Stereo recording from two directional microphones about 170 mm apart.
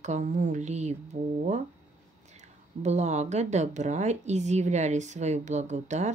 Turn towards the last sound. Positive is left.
turn(degrees=-45)  # may be behind; listen again after turning